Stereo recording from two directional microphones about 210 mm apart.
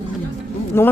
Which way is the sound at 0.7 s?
10° left (ahead or behind).